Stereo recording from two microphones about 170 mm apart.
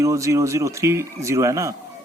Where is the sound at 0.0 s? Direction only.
20° right (ahead or behind).